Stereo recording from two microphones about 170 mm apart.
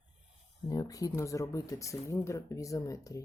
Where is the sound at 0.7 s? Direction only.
20° left (ahead or behind).